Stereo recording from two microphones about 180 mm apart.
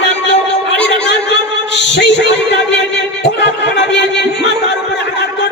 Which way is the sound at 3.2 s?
80° left.